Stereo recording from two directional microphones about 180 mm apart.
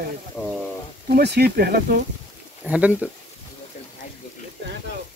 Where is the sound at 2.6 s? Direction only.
5° right (ahead or behind).